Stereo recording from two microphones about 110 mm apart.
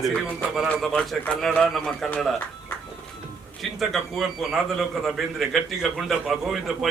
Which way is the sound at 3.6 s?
Centre (ahead or behind).